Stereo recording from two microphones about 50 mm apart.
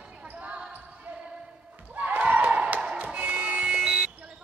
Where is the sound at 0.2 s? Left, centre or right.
Right.